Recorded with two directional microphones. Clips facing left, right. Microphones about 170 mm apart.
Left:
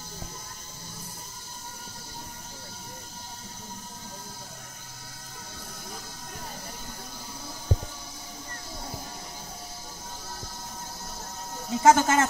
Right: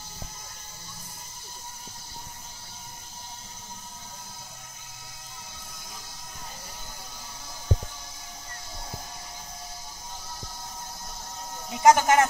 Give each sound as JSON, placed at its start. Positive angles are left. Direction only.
{"t": 11.7, "sound": "speech", "side_deg": -15}